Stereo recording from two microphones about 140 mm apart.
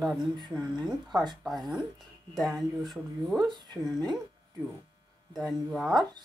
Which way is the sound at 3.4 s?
30° right (ahead or behind).